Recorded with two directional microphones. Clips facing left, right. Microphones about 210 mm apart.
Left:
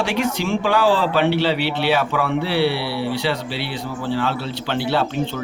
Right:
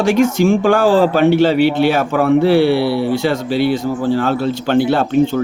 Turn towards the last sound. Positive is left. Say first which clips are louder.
# right 8 dB
turn(degrees=-50)  # may be behind; listen again after turning